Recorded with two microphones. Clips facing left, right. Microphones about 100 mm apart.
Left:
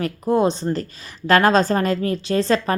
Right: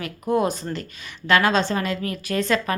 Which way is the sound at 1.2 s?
40° left (ahead or behind).